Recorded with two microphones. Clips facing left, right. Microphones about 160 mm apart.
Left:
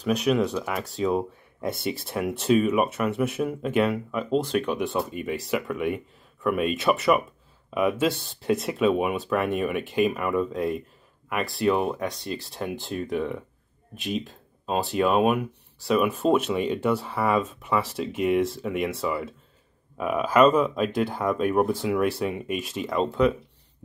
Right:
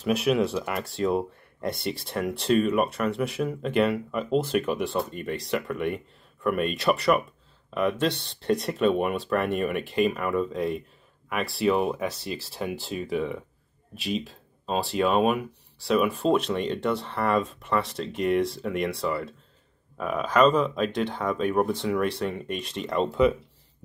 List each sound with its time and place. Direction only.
0.0 s speech: 5° right (ahead or behind)